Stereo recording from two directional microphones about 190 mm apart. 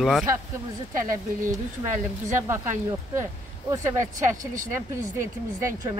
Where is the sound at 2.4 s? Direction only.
15° right (ahead or behind).